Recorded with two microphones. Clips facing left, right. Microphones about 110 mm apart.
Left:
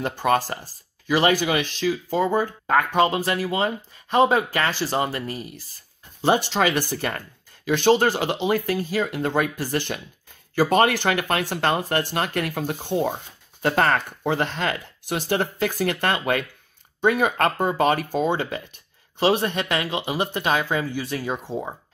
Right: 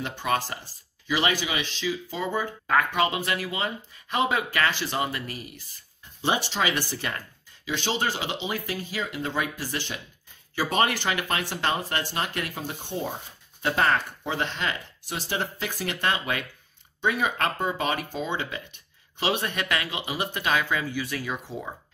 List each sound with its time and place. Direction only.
0.0 s speech: 45° left (ahead or behind)
2.6 s speech: 30° left (ahead or behind)
6.2 s speech: 50° left (ahead or behind); by 13.1 s 65° left (ahead or behind)
13.6 s speech: 55° left (ahead or behind); by 21.7 s 30° left (ahead or behind)